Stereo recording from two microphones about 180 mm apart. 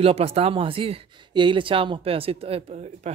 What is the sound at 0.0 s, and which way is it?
Speech, 35° right (ahead or behind).